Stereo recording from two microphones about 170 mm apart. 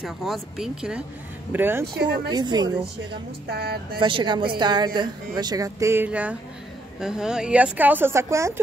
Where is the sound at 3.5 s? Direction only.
70° right (ahead or behind).